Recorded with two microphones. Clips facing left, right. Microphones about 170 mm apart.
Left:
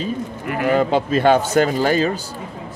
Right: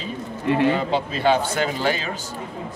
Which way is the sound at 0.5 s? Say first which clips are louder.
Right 1 dB; 25° right (ahead or behind).